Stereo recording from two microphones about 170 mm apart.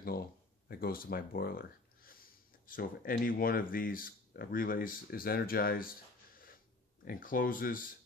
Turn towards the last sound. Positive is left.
turn(degrees=55)  # may be behind; listen again after turning